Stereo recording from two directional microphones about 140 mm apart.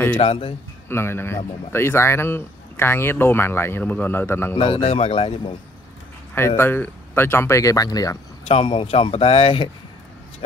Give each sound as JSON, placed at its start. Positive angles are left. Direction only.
{"t": 0.2, "sound": "speech", "side_deg": 45}
{"t": 0.8, "sound": "a man's voice", "side_deg": 15}
{"t": 4.6, "sound": "speech", "side_deg": 40}
{"t": 6.3, "sound": "a man's voice", "side_deg": 15}
{"t": 8.5, "sound": "speech", "side_deg": 40}